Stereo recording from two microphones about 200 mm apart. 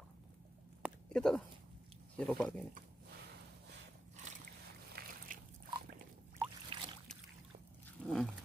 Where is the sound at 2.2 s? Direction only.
5° left (ahead or behind).